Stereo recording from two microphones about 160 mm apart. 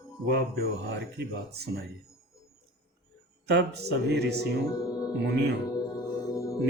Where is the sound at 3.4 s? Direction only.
90° right.